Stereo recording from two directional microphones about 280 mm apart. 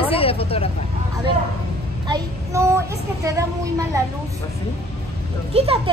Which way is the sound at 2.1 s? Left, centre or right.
Centre.